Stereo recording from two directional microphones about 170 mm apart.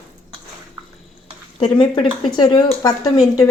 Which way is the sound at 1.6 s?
30° left (ahead or behind).